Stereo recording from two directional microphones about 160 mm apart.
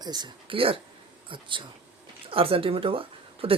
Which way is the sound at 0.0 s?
25° right (ahead or behind).